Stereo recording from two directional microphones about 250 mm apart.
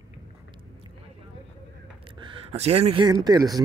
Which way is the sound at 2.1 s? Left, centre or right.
Right.